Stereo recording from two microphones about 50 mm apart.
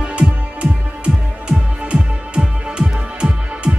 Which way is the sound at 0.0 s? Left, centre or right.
Right.